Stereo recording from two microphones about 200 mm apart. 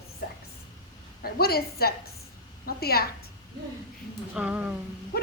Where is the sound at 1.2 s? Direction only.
50° left (ahead or behind).